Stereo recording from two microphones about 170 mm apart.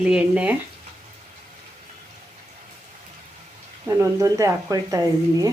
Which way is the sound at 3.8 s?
20° right (ahead or behind).